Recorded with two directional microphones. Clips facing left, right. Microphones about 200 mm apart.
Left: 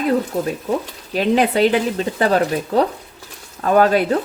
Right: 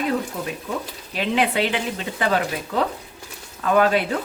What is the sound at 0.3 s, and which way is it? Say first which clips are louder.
Speech: left 7 dB; 35° left (ahead or behind).